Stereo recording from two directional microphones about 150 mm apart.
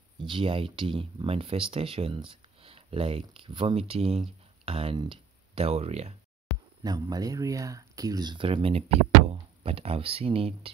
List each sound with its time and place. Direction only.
0.2 s speech: 35° right (ahead or behind)
6.8 s speech: 25° right (ahead or behind)